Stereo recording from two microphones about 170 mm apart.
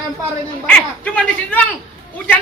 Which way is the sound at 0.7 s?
5° left (ahead or behind).